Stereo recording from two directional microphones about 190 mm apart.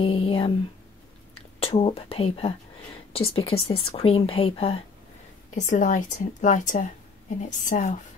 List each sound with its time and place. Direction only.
0.0 s a sound: 30° left (ahead or behind)
1.6 s a woman's voice: 30° left (ahead or behind)
5.5 s a woman's voice: 40° left (ahead or behind)